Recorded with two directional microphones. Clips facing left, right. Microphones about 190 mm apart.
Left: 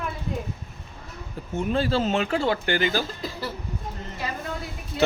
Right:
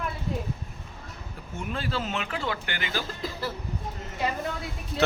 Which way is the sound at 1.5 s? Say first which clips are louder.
Left 8 dB; 30° left (ahead or behind).